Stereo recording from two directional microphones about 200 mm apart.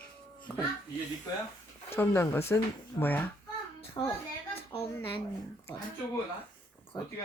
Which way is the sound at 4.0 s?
25° left (ahead or behind).